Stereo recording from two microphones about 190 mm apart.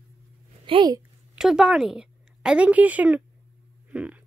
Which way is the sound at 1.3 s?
Centre (ahead or behind).